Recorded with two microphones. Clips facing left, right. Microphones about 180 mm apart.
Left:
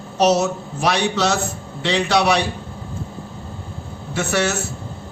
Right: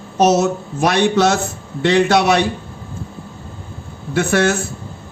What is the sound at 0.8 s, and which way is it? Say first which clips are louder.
A man's voice: right 5 dB; 55° right (ahead or behind).